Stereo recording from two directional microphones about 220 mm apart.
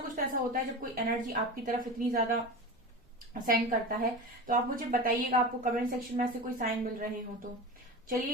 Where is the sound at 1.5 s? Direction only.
40° right (ahead or behind).